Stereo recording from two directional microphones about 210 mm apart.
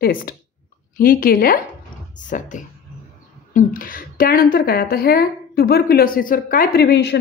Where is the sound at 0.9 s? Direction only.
40° left (ahead or behind).